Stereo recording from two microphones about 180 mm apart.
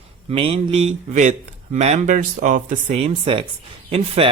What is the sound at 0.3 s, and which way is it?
Speech, 35° right (ahead or behind).